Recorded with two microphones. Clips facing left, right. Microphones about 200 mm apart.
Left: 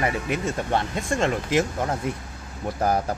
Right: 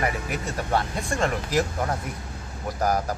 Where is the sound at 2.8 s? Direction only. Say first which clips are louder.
Left 1 dB; 30° left (ahead or behind).